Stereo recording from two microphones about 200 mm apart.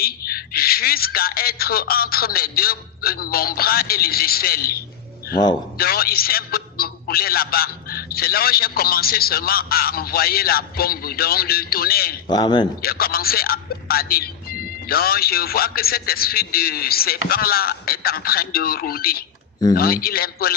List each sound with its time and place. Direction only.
0.0 s speech: 50° left (ahead or behind)
12.3 s a man's voice: 20° left (ahead or behind)
12.8 s speech: 50° left (ahead or behind)